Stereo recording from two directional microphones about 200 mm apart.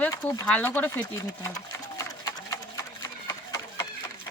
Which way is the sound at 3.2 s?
15° left (ahead or behind).